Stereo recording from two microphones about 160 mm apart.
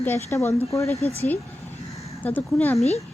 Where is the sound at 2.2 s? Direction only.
10° left (ahead or behind).